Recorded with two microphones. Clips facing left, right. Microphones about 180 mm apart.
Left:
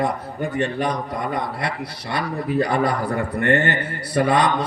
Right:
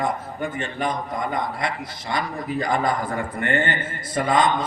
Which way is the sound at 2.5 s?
65° left (ahead or behind).